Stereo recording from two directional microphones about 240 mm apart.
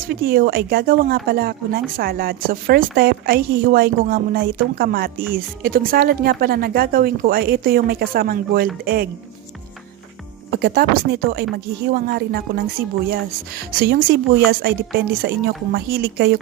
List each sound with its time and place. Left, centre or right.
0.1 s speech: right
10.5 s speech: right
13.7 s speech: right